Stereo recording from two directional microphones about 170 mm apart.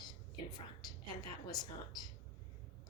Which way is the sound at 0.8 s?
25° left (ahead or behind).